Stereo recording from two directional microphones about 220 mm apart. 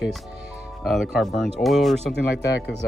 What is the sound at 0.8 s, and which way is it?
Speech, centre (ahead or behind).